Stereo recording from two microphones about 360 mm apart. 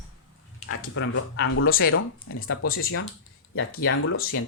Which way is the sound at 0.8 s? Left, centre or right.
Left.